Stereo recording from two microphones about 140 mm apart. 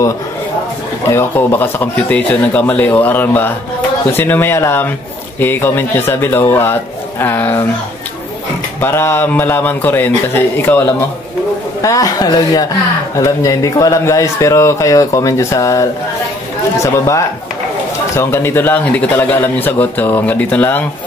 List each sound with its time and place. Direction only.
1.0 s a man's voice: 15° left (ahead or behind)
8.8 s a man's voice: 15° left (ahead or behind)